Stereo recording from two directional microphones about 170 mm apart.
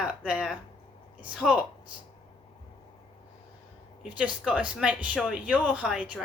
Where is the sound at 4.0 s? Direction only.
5° right (ahead or behind).